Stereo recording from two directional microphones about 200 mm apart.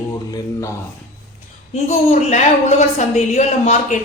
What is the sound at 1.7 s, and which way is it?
A woman's voice, 35° left (ahead or behind).